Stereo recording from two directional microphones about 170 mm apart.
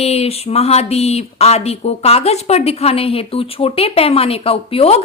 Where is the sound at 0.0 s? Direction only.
40° left (ahead or behind).